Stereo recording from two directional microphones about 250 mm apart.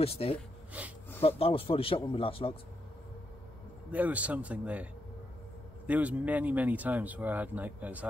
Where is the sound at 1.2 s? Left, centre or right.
Left.